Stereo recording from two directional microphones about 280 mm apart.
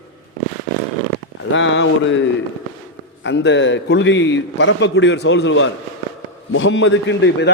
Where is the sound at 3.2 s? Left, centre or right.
Left.